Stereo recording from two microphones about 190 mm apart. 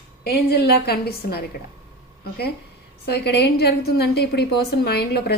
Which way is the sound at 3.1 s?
60° left (ahead or behind).